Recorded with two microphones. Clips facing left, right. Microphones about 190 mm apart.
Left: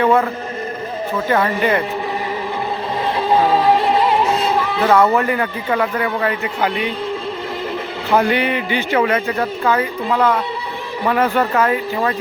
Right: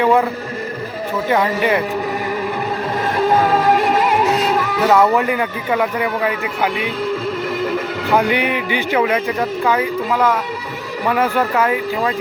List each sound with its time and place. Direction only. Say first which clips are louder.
0.0 s speech: even; 15° right (ahead or behind)
1.3 s speech: even; 10° right (ahead or behind)
3.8 s music: even; 25° left (ahead or behind)
4.8 s speech: even; 10° right (ahead or behind)
8.1 s speech: left 1 dB; 10° right (ahead or behind)